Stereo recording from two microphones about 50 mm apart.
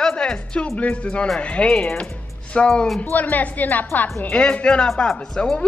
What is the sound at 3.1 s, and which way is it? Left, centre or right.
Speech, left.